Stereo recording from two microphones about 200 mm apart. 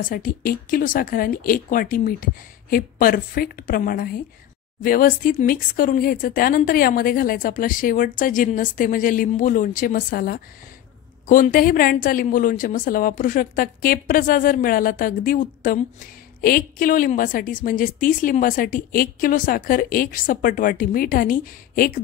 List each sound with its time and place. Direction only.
0.0 s a woman's voice: 45° left (ahead or behind)